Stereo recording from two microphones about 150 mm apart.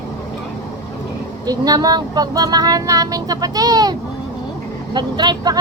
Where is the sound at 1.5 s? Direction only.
25° right (ahead or behind).